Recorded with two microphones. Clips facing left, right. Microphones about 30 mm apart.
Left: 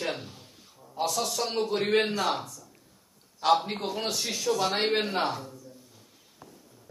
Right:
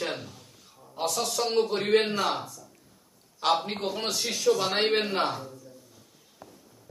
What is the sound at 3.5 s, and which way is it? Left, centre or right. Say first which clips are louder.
A man's voice: left 2 dB; centre.